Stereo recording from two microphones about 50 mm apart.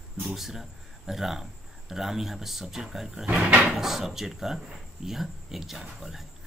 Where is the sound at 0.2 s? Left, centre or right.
Centre.